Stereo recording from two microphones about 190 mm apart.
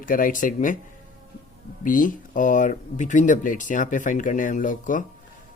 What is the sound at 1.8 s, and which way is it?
Speech, 45° left (ahead or behind).